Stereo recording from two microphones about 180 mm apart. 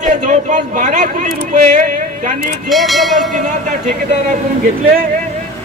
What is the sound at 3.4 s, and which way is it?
Speech, 40° right (ahead or behind).